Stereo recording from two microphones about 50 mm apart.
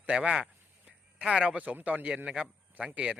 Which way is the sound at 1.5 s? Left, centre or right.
Right.